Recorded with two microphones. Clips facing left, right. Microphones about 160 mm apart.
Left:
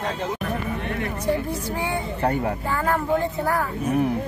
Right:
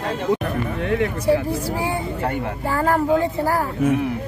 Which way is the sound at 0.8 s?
90° right.